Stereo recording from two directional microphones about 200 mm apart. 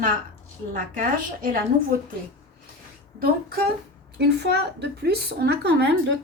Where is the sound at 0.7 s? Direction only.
45° right (ahead or behind).